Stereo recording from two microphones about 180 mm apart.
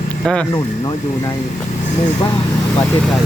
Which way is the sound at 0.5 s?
25° left (ahead or behind).